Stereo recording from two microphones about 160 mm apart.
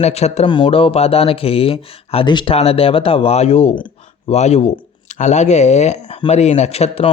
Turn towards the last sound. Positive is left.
turn(degrees=40)  # may be behind; listen again after turning